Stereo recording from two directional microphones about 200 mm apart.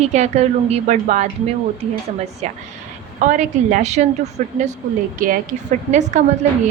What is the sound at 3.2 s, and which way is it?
A woman's voice, 40° right (ahead or behind).